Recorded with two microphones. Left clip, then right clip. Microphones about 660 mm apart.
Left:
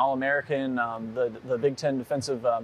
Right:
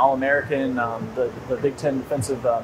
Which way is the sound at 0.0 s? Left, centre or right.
Left.